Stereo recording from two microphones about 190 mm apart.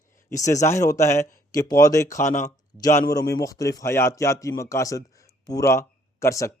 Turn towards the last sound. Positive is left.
turn(degrees=15)  # may be behind; listen again after turning